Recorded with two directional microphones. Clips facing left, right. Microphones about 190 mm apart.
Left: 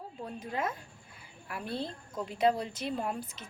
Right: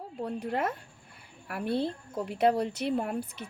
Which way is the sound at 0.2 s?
65° right (ahead or behind).